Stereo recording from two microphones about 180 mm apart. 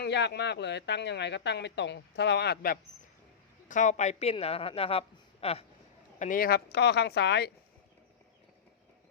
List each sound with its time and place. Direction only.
0.0 s speech: 70° left (ahead or behind)
3.7 s a man's voice: 40° left (ahead or behind)
6.1 s speech: 45° left (ahead or behind); by 7.5 s 70° left (ahead or behind)